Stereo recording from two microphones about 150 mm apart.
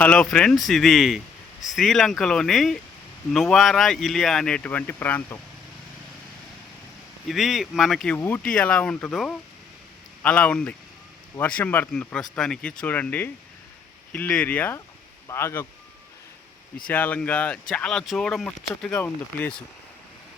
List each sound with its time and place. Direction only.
0.0 s speech: 5° left (ahead or behind)
7.3 s speech: centre (ahead or behind); by 15.6 s 20° left (ahead or behind)
16.8 s speech: 10° left (ahead or behind)